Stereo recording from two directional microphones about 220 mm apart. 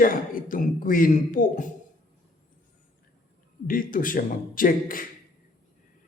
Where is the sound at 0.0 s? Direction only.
40° left (ahead or behind).